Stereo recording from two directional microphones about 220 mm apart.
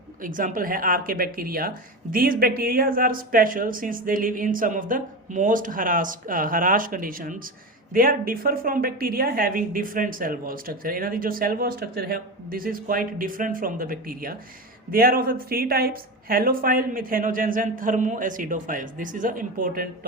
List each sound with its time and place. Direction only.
0.2 s a woman's voice: 35° right (ahead or behind)